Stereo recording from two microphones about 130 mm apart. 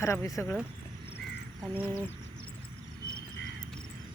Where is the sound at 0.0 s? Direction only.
25° left (ahead or behind).